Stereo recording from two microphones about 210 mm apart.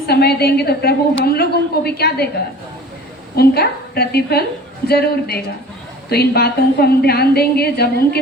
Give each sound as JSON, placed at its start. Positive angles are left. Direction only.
{"t": 0.1, "sound": "a woman's voice", "side_deg": 50}
{"t": 3.3, "sound": "a woman's voice", "side_deg": 50}